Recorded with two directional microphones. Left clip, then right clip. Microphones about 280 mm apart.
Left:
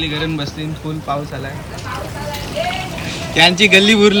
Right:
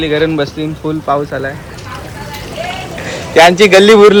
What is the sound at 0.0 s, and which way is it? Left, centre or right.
Speech, centre.